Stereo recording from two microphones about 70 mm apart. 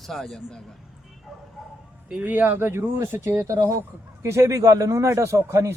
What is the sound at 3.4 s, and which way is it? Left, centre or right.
A man's voice, right.